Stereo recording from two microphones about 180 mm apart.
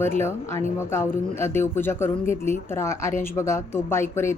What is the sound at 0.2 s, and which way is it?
Speech, 15° left (ahead or behind).